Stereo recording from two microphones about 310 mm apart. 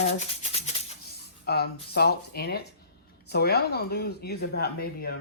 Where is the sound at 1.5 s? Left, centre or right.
Left.